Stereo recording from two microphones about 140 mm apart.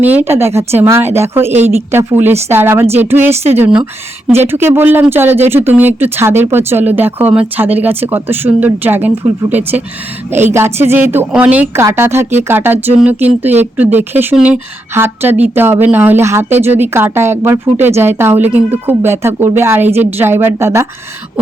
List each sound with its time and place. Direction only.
0.0 s speech: 15° right (ahead or behind)